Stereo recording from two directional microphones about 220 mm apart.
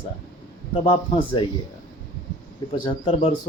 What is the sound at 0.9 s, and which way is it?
Speech, 20° left (ahead or behind).